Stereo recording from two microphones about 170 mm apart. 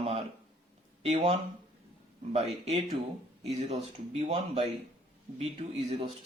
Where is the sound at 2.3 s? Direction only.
40° right (ahead or behind).